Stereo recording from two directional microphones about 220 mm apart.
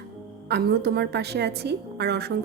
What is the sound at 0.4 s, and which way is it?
A woman's voice, 50° right (ahead or behind).